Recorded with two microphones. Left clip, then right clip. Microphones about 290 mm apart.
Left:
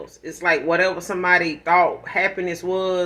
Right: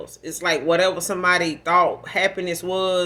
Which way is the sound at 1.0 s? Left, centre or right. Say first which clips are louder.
Left 1 dB; right.